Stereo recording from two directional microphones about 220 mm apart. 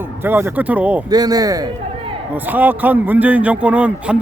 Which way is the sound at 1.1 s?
15° right (ahead or behind).